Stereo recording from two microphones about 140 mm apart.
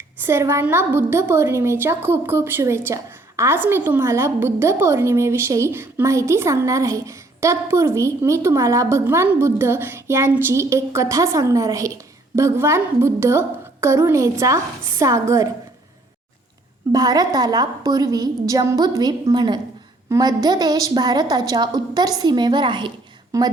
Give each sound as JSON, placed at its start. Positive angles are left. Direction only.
{"t": 0.2, "sound": "a woman's voice", "side_deg": -20}
{"t": 16.9, "sound": "a woman's voice", "side_deg": -25}
{"t": 23.3, "sound": "a woman's voice", "side_deg": -20}